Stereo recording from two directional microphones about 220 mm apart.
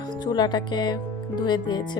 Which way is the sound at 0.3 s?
20° left (ahead or behind).